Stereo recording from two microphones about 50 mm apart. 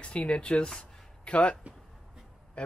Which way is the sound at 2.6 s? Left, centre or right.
Centre.